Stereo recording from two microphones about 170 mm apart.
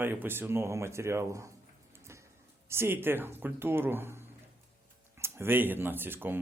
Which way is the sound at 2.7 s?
15° right (ahead or behind).